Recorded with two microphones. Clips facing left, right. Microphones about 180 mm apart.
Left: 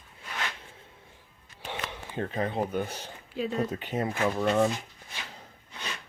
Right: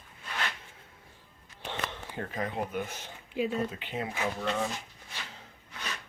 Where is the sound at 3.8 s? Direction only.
45° left (ahead or behind).